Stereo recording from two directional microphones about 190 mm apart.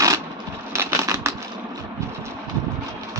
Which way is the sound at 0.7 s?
15° right (ahead or behind).